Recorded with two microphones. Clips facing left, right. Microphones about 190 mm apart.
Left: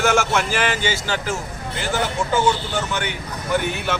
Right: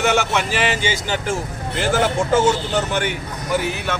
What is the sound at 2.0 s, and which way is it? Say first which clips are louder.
Speech: right 2 dB; 45° right (ahead or behind).